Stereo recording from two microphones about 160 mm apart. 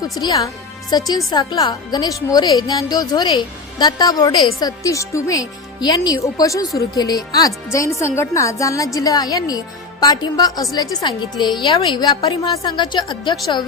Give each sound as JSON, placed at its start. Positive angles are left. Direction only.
{"t": 0.0, "sound": "a woman's voice", "side_deg": 25}